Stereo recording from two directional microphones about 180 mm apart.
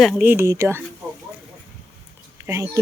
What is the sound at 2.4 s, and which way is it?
Speech, 20° right (ahead or behind).